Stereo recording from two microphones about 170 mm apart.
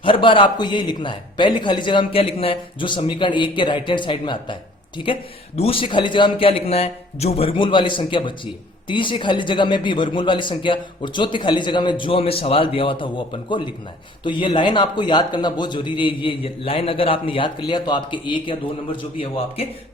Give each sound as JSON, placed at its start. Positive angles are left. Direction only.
{"t": 0.0, "sound": "a man's voice", "side_deg": 30}